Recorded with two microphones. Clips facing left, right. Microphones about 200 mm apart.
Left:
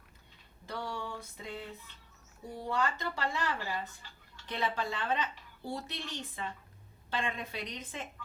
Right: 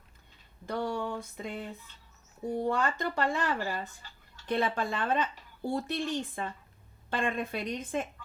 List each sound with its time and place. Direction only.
0.6 s a woman's voice: 50° right (ahead or behind)